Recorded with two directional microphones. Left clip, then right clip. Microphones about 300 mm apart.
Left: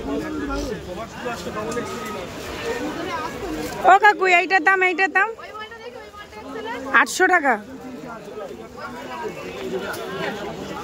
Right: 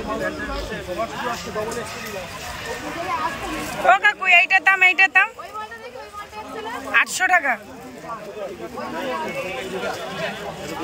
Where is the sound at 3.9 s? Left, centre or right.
Centre.